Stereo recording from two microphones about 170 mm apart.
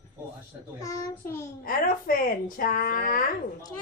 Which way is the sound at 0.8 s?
20° left (ahead or behind).